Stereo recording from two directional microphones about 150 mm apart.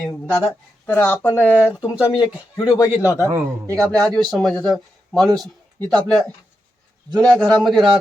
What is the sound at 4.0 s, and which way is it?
Speech, 5° left (ahead or behind).